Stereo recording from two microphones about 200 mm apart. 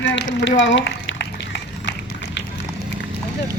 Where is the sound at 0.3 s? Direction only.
65° left (ahead or behind).